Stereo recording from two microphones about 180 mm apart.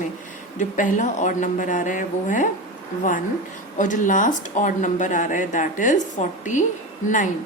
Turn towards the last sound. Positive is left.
turn(degrees=45)  # may be behind; listen again after turning